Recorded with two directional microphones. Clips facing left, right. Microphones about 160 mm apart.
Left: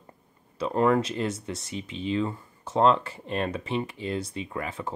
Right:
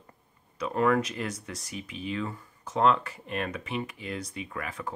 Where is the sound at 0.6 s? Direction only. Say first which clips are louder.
Left 2 dB; 30° left (ahead or behind).